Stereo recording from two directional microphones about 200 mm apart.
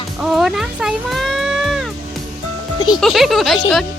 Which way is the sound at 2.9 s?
Centre (ahead or behind).